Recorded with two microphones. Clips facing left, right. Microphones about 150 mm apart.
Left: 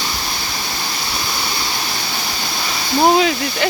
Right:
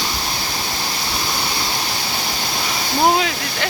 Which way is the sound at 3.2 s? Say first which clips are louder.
Left 5 dB; 5° left (ahead or behind).